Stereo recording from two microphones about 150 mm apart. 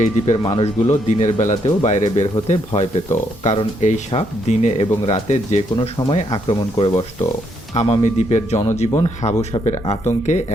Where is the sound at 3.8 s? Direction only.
50° left (ahead or behind).